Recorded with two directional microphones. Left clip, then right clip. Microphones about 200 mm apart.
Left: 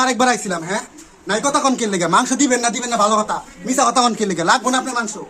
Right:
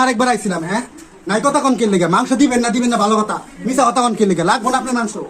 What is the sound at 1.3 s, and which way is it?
Speech, 15° left (ahead or behind).